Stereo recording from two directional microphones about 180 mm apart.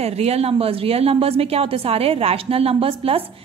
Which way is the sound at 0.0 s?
35° right (ahead or behind).